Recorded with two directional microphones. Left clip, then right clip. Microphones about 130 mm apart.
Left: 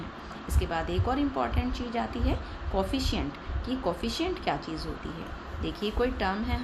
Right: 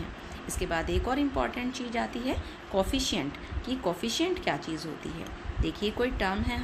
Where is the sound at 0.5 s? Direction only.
20° right (ahead or behind).